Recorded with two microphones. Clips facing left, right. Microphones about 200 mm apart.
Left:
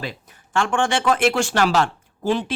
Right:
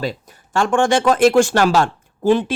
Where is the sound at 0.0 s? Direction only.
40° right (ahead or behind).